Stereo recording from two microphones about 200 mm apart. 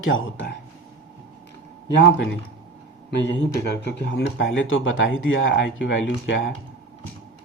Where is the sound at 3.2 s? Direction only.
65° left (ahead or behind).